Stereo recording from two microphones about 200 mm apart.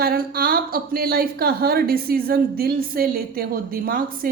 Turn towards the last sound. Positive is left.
turn(degrees=-45)  # may be behind; listen again after turning